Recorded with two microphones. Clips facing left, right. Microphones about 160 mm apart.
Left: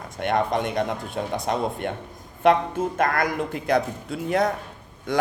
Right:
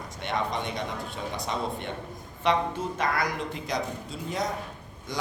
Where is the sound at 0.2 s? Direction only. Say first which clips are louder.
Left 7 dB; 55° left (ahead or behind).